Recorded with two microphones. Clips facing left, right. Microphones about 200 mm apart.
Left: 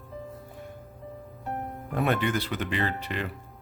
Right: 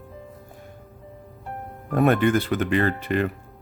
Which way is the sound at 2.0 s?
50° right (ahead or behind).